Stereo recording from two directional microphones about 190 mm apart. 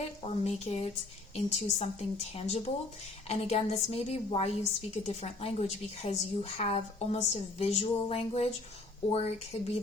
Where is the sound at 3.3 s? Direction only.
35° left (ahead or behind).